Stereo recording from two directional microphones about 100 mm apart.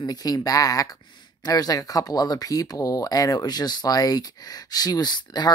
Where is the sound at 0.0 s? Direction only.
40° left (ahead or behind).